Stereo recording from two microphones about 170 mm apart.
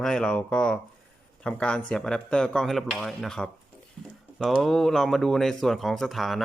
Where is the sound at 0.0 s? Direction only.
5° left (ahead or behind).